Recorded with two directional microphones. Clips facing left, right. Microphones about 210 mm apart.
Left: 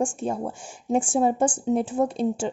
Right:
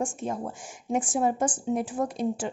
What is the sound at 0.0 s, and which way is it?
Speech, 30° left (ahead or behind).